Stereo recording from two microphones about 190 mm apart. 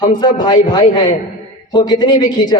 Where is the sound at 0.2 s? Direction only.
25° left (ahead or behind).